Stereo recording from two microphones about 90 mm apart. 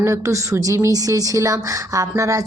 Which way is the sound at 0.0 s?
35° right (ahead or behind).